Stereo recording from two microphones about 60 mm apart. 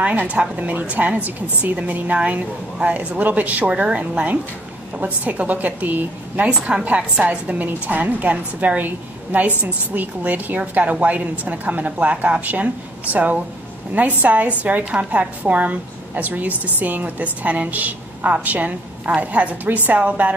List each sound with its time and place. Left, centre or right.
0.0 s a woman's voice: right